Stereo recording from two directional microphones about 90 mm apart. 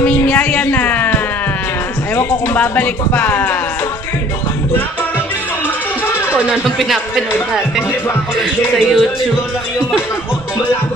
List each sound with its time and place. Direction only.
0.0 s music: 20° left (ahead or behind)
2.1 s speech: 25° left (ahead or behind)
6.3 s speech: 15° right (ahead or behind)
8.4 s music: 5° right (ahead or behind)